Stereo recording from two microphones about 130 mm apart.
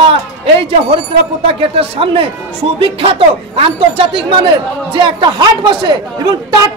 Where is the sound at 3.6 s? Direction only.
45° right (ahead or behind).